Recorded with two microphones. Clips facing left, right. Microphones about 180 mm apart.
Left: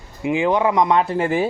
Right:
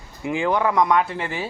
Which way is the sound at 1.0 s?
45° left (ahead or behind).